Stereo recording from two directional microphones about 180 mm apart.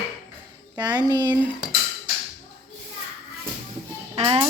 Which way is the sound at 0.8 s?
25° right (ahead or behind).